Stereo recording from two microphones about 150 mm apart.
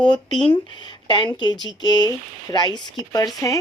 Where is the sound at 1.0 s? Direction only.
30° left (ahead or behind).